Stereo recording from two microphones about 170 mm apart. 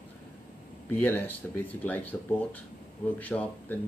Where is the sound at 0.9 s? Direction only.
10° left (ahead or behind).